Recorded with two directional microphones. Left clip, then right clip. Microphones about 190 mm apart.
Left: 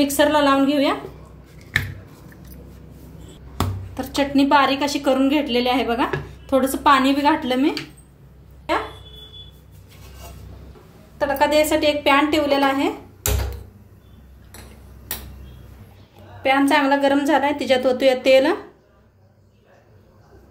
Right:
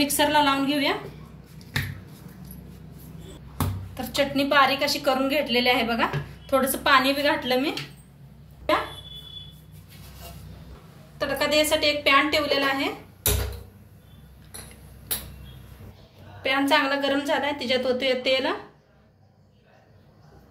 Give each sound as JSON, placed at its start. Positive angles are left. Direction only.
{"t": 0.0, "sound": "a woman's voice", "side_deg": 45}
{"t": 3.9, "sound": "a woman's voice", "side_deg": 55}
{"t": 11.1, "sound": "a woman's voice", "side_deg": 50}
{"t": 16.4, "sound": "a woman's voice", "side_deg": 40}